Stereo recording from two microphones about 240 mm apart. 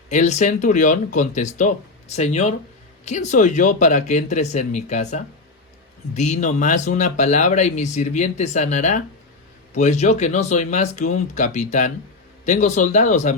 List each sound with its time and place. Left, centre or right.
0.1 s speech: left